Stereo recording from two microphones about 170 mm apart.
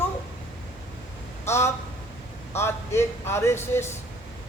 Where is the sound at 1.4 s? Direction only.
15° left (ahead or behind).